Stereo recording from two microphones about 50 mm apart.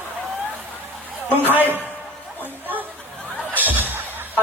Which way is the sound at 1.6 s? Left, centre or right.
Right.